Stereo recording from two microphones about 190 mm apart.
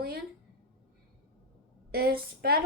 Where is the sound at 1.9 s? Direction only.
55° right (ahead or behind).